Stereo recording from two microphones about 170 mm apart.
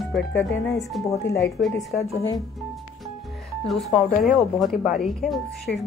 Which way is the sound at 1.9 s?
15° left (ahead or behind).